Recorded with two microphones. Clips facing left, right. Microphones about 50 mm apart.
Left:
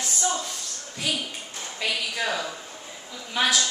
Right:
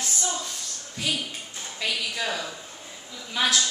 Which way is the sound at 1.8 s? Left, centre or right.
Centre.